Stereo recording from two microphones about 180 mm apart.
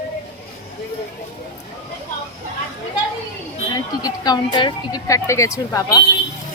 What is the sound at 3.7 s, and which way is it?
Speech, 20° left (ahead or behind).